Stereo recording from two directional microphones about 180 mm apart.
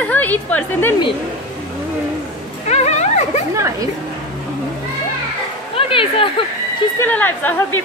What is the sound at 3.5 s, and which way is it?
Speech, 15° right (ahead or behind).